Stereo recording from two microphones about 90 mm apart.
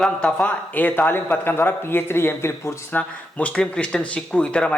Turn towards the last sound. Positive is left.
turn(degrees=15)  # may be behind; listen again after turning